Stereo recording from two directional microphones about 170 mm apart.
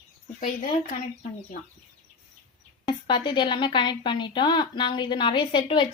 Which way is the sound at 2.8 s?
25° left (ahead or behind).